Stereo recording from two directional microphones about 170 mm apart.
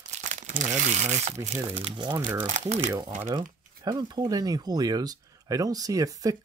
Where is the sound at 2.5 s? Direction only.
45° right (ahead or behind).